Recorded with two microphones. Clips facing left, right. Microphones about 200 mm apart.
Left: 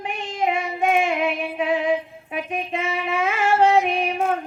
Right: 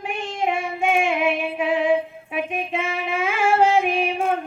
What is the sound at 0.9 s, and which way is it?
Female singing, 5° right (ahead or behind).